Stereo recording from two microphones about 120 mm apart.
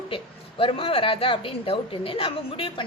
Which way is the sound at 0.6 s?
55° left (ahead or behind).